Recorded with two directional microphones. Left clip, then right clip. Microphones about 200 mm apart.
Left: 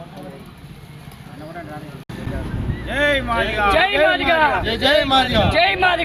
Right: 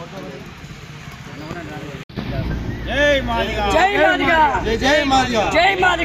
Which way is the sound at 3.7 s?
25° left (ahead or behind).